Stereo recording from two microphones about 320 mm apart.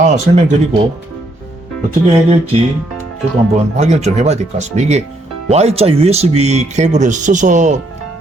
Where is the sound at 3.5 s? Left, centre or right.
Right.